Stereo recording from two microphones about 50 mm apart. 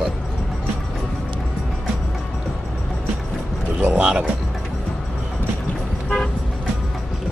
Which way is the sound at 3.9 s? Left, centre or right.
Centre.